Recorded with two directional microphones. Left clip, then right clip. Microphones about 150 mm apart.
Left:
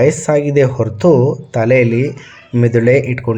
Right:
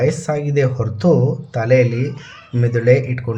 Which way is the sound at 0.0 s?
25° left (ahead or behind).